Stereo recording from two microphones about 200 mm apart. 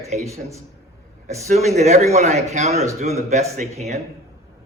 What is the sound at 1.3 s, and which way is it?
Speech, 35° right (ahead or behind).